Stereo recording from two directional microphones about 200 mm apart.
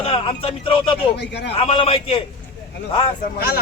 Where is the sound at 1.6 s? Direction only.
30° left (ahead or behind).